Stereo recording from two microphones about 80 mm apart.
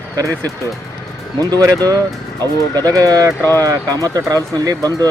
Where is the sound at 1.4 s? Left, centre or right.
Right.